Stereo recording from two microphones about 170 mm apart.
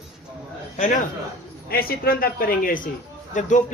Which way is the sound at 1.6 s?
60° left (ahead or behind).